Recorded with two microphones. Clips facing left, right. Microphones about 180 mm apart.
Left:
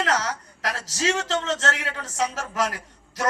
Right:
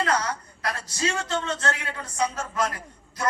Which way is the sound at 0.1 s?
85° left.